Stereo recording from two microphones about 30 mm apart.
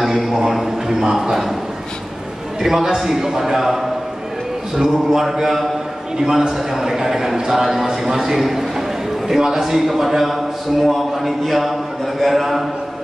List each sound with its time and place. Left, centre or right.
0.0 s a sound: centre
0.8 s a man's voice: centre
2.7 s a man's voice: centre
6.2 s a man's voice: right
6.7 s a man's voice: centre
9.8 s a man's voice: centre